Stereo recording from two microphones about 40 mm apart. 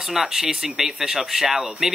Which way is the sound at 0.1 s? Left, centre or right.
Centre.